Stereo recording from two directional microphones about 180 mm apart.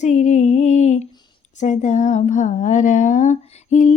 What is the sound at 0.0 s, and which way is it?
Music, 40° left (ahead or behind).